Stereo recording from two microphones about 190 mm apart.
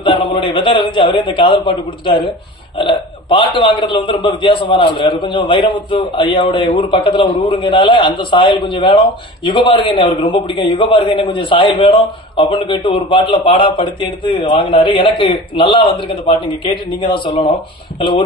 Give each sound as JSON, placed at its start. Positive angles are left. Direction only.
{"t": 0.0, "sound": "a man's voice", "side_deg": 25}